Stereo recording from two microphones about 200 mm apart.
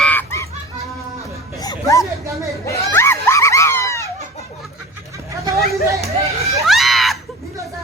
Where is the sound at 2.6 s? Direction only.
10° left (ahead or behind).